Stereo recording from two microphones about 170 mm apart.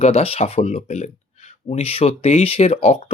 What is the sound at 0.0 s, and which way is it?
Speech, 35° left (ahead or behind).